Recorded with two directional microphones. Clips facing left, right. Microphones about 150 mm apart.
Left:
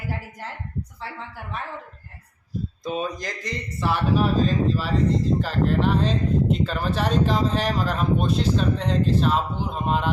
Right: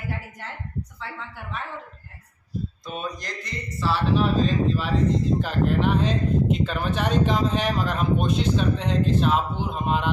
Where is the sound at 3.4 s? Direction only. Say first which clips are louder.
Even; 55° left (ahead or behind).